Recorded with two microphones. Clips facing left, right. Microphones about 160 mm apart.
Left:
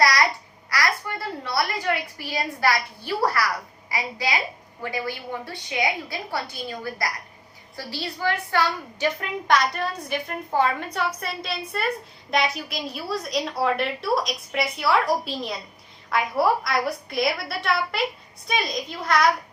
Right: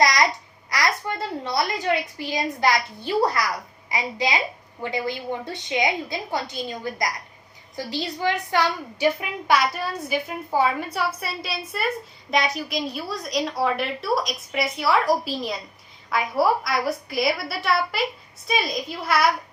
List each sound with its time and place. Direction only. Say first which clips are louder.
0.0 s babbling: right 1 dB; 20° right (ahead or behind)
3.8 s a woman's voice: right 2 dB; 20° right (ahead or behind)